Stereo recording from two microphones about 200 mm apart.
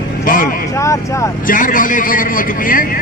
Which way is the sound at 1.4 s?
45° left (ahead or behind).